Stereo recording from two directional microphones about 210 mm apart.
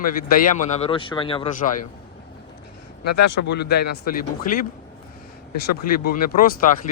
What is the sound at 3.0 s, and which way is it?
Speech, 55° left (ahead or behind).